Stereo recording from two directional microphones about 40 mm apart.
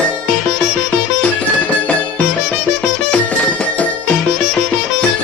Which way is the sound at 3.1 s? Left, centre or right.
Left.